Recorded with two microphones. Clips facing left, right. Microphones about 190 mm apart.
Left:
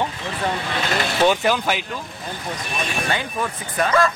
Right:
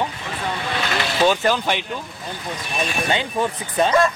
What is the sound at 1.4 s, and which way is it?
Speech, 5° left (ahead or behind).